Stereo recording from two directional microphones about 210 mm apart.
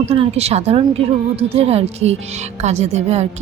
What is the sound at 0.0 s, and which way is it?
A woman's voice, 30° right (ahead or behind).